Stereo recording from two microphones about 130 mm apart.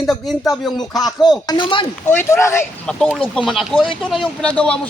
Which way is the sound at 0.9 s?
30° left (ahead or behind).